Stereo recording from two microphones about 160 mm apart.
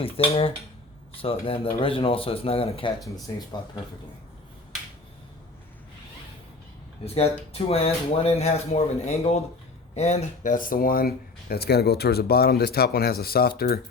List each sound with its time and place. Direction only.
0.0 s speech: 35° left (ahead or behind)
3.3 s speech: 20° left (ahead or behind)
7.0 s speech: 40° left (ahead or behind); by 13.8 s 70° left (ahead or behind)